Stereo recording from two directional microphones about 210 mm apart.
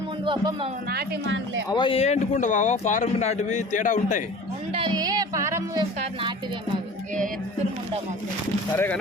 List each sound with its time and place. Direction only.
0.3 s speech: 25° right (ahead or behind)
0.9 s speech: 55° right (ahead or behind)
1.7 s speech: 25° left (ahead or behind)
4.7 s speech: 25° right (ahead or behind)
8.7 s speech: 10° left (ahead or behind)